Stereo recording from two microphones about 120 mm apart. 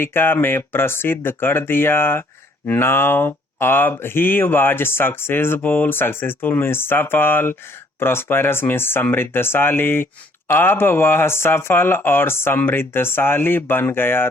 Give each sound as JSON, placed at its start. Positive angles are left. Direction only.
{"t": 0.0, "sound": "speech", "side_deg": 20}